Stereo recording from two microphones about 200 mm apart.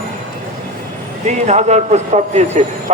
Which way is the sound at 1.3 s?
35° right (ahead or behind).